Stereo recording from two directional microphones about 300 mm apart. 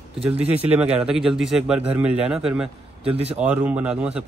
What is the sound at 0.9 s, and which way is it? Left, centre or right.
A man's voice, centre.